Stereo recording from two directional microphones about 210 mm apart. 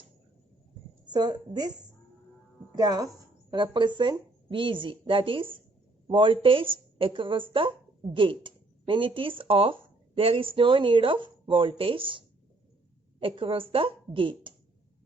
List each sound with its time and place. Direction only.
1.0 s a woman's voice: 20° right (ahead or behind)